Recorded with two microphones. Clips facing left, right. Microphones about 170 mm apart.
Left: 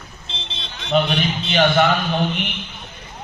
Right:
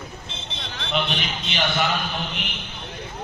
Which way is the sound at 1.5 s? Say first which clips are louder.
Left 8 dB; 55° left (ahead or behind).